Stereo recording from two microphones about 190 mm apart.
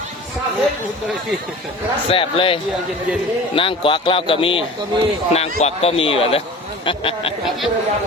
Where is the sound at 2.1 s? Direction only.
30° left (ahead or behind).